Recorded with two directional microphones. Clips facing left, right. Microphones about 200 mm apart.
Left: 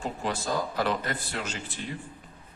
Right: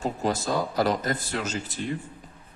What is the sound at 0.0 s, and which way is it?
Speech, 40° right (ahead or behind).